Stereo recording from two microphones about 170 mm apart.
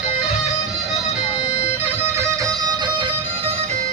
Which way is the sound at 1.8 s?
15° right (ahead or behind).